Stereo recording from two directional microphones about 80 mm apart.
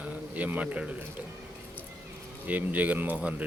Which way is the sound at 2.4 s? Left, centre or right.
Right.